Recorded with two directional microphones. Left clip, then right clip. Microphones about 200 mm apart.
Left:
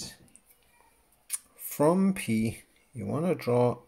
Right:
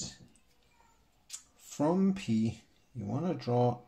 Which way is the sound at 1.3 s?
35° left (ahead or behind).